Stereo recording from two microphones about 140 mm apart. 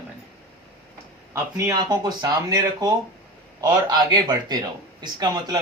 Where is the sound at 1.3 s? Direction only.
25° right (ahead or behind).